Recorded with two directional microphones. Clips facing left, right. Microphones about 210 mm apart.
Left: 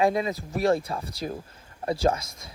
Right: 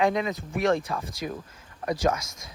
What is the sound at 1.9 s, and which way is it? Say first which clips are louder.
Speech: left 1 dB; 30° left (ahead or behind).